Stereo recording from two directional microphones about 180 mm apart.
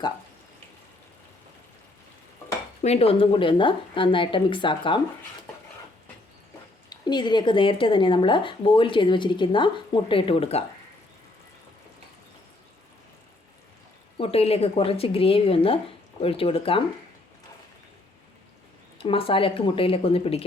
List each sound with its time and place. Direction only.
2.8 s speech: 35° left (ahead or behind)
6.9 s speech: 25° left (ahead or behind)
14.2 s speech: 35° left (ahead or behind)
18.9 s speech: 30° left (ahead or behind)